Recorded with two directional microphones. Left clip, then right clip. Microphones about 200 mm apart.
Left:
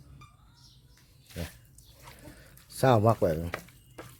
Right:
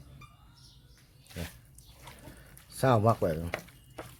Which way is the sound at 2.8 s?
25° left (ahead or behind).